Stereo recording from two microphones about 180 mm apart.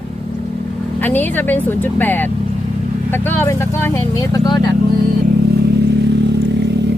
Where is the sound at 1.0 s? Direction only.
10° left (ahead or behind).